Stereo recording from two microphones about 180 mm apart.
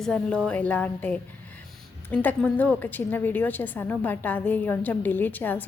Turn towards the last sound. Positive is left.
turn(degrees=10)  # may be behind; listen again after turning